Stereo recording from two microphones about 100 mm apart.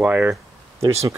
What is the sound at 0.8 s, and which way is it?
Speech, 30° right (ahead or behind).